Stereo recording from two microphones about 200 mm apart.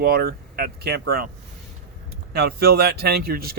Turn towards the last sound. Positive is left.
turn(degrees=-50)  # may be behind; listen again after turning